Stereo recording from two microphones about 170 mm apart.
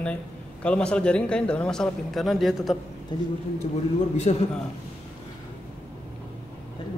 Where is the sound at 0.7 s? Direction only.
5° left (ahead or behind).